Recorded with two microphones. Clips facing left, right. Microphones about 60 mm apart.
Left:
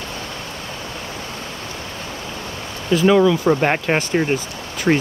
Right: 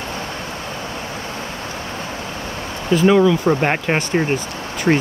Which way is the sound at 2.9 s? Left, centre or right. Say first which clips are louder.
Right 1 dB; centre.